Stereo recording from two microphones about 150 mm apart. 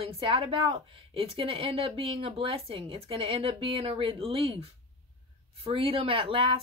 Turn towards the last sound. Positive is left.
turn(degrees=-35)  # may be behind; listen again after turning